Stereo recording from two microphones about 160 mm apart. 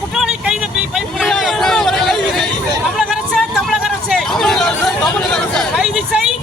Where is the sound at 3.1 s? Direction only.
Centre (ahead or behind).